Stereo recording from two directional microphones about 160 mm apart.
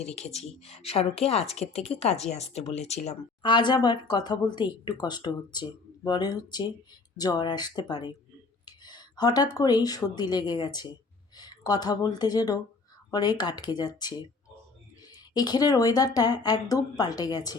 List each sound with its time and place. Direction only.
0.0 s speech: 40° left (ahead or behind)
3.4 s speech: 30° left (ahead or behind)